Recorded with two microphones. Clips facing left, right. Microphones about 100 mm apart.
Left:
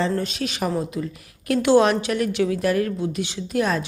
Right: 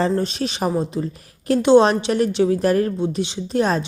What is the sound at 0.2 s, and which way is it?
A woman's voice, 30° right (ahead or behind).